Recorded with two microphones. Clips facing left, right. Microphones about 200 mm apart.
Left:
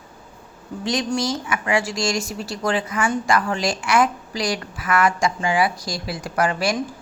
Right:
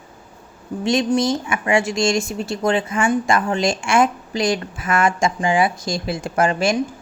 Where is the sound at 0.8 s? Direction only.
25° right (ahead or behind).